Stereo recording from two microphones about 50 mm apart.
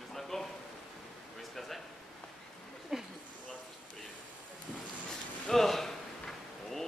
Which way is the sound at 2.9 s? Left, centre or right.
Centre.